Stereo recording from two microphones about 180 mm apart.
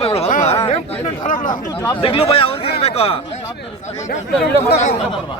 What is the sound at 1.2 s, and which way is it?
Chatter, 45° left (ahead or behind).